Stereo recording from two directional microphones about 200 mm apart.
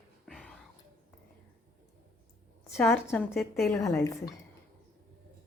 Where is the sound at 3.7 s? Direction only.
15° left (ahead or behind).